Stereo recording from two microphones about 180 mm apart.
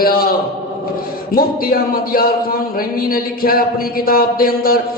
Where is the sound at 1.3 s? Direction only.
55° left (ahead or behind).